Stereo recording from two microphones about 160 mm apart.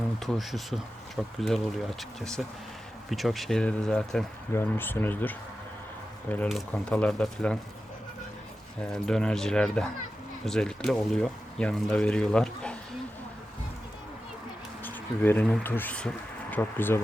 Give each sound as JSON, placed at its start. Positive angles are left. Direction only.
{"t": 0.2, "sound": "speech", "side_deg": 0}
{"t": 8.8, "sound": "speech", "side_deg": 5}
{"t": 14.8, "sound": "speech", "side_deg": 10}